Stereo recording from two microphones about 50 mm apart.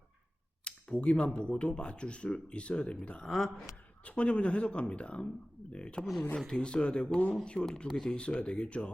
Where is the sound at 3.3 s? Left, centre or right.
Centre.